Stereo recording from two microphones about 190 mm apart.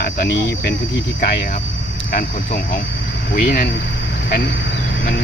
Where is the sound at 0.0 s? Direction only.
55° left (ahead or behind).